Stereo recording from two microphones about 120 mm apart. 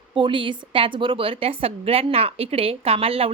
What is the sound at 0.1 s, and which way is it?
A woman's voice, 45° right (ahead or behind).